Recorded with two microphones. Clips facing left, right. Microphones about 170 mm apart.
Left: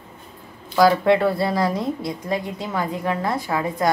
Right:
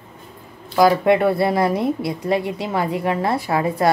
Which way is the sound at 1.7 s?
65° right (ahead or behind).